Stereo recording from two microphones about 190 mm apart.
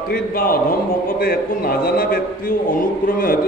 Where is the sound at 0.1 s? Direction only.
50° left (ahead or behind).